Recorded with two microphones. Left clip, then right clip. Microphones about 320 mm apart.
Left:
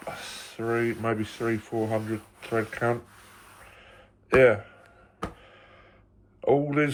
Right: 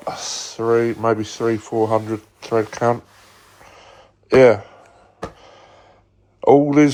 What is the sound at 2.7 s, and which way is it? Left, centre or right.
Speech, right.